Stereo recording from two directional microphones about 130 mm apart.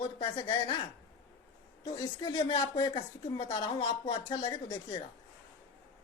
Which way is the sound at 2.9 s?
35° left (ahead or behind).